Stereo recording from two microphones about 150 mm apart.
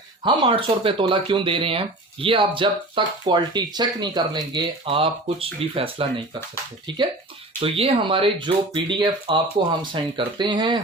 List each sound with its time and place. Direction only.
0.2 s speech: 35° right (ahead or behind)